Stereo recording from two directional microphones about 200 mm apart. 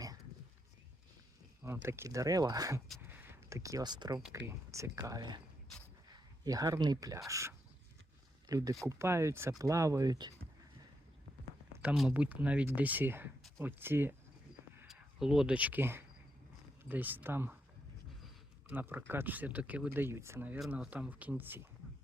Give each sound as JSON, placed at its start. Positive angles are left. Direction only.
{"t": 1.6, "sound": "speech", "side_deg": -10}
{"t": 6.4, "sound": "speech", "side_deg": -20}
{"t": 11.7, "sound": "speech", "side_deg": -10}
{"t": 18.7, "sound": "speech", "side_deg": -10}